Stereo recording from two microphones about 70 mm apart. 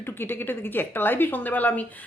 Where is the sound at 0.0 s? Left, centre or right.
Left.